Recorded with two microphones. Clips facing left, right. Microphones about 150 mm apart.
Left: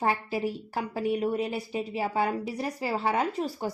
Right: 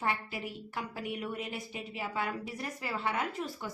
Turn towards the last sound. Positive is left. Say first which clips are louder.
# left 7 dB
turn(degrees=35)  # may be behind; listen again after turning